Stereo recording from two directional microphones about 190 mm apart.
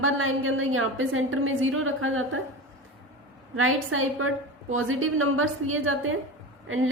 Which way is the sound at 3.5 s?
90° right.